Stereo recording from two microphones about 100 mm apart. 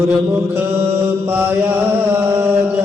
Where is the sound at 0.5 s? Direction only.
25° right (ahead or behind).